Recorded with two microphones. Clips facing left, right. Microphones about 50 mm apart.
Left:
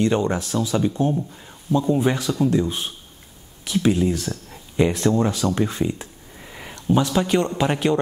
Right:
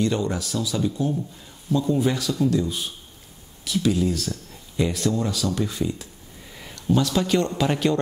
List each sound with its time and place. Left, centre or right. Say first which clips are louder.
0.0 s a man's voice: left 4 dB; left